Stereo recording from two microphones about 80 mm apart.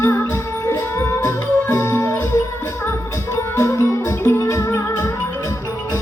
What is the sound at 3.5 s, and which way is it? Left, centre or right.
Music, left.